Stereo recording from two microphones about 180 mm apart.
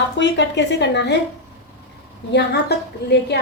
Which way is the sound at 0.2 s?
75° left (ahead or behind).